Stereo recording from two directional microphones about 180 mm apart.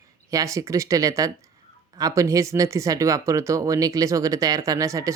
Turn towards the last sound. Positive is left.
turn(degrees=-15)  # may be behind; listen again after turning